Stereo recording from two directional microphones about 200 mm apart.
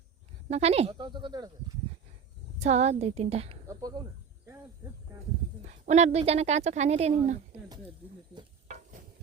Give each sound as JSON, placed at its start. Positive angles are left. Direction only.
{"t": 0.4, "sound": "speech", "side_deg": -30}
{"t": 2.6, "sound": "speech", "side_deg": -35}
{"t": 3.7, "sound": "speech", "side_deg": -20}
{"t": 5.6, "sound": "speech", "side_deg": -35}
{"t": 8.4, "sound": "stir", "side_deg": -35}